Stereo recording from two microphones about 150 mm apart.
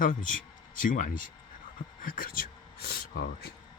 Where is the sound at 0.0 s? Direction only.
60° left (ahead or behind).